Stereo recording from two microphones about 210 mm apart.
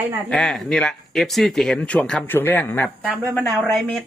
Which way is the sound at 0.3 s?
Centre (ahead or behind).